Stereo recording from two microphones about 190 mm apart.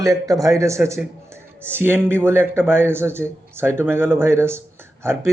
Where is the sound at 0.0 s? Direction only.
20° right (ahead or behind).